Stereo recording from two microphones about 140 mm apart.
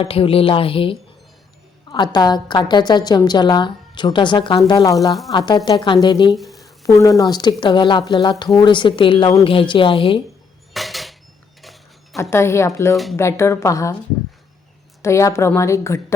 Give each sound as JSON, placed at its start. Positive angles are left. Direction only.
{"t": 0.0, "sound": "a woman's voice", "side_deg": 40}
{"t": 6.3, "sound": "a sound", "side_deg": 0}
{"t": 6.8, "sound": "a woman's voice", "side_deg": 25}
{"t": 10.8, "sound": "dishes", "side_deg": 0}
{"t": 12.1, "sound": "a woman's voice", "side_deg": 20}
{"t": 15.0, "sound": "a woman's voice", "side_deg": 20}